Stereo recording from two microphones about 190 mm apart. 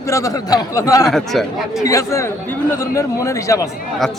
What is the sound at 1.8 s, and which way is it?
Speech, 15° left (ahead or behind).